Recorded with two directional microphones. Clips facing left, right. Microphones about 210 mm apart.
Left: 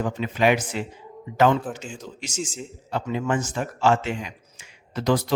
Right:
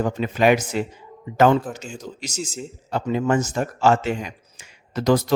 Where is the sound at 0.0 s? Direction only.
45° right (ahead or behind).